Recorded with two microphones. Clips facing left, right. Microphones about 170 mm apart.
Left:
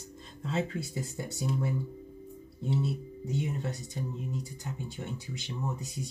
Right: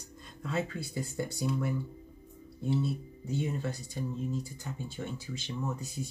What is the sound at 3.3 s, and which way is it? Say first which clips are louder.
Speech: even; 20° left (ahead or behind).